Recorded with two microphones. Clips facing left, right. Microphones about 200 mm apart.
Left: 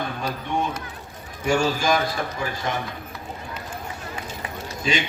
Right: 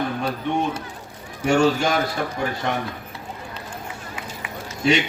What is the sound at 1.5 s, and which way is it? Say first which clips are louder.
Speech: right 3 dB; 65° right (ahead or behind).